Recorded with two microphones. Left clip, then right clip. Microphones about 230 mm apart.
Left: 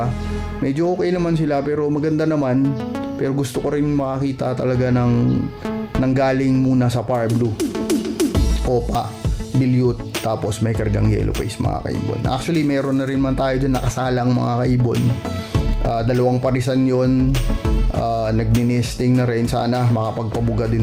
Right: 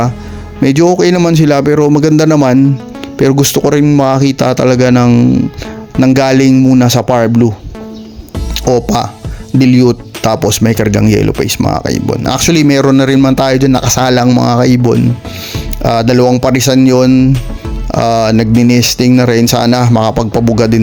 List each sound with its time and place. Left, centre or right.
0.6 s speech: right
8.7 s speech: right